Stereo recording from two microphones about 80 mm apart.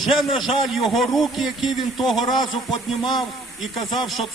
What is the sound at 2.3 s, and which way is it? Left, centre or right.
Music, left.